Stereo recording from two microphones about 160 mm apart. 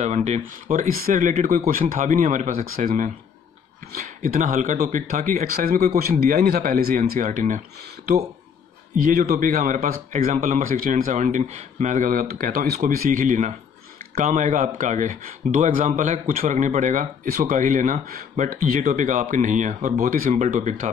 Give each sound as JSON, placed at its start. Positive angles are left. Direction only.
{"t": 0.0, "sound": "speech", "side_deg": -45}
{"t": 8.9, "sound": "speech", "side_deg": -60}
{"t": 9.6, "sound": "speech", "side_deg": -60}